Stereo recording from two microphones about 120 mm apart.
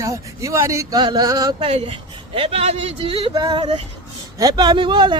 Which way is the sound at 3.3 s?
40° right (ahead or behind).